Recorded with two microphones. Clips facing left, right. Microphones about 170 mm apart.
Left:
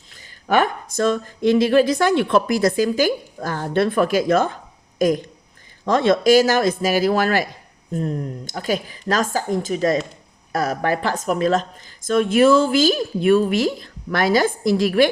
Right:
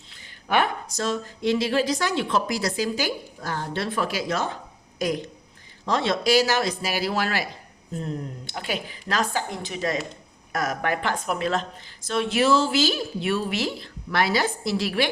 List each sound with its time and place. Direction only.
0.4 s a woman's voice: 45° left (ahead or behind)